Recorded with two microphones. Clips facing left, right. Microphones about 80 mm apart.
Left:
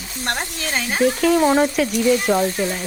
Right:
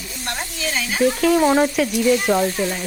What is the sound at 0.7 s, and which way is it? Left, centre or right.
Speech, left.